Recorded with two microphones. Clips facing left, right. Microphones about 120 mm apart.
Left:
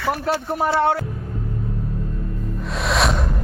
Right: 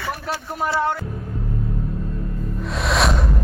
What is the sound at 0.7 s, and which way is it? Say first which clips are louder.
Speech: left 3 dB; 70° left (ahead or behind).